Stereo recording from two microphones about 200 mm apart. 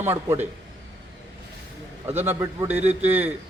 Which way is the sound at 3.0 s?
10° right (ahead or behind).